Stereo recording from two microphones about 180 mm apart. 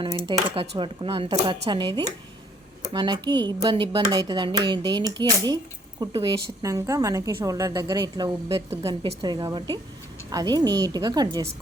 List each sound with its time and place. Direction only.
0.0 s speech: 30° right (ahead or behind)